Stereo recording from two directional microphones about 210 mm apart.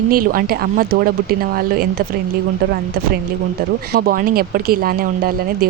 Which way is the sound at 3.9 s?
45° right (ahead or behind).